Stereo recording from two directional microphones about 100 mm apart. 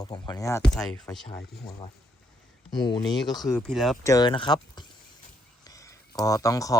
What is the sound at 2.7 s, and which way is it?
Speech, 45° left (ahead or behind).